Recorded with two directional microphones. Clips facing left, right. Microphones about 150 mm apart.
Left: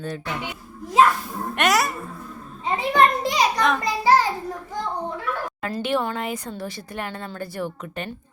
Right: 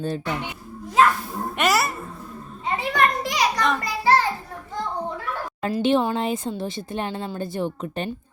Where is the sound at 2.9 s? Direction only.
25° left (ahead or behind).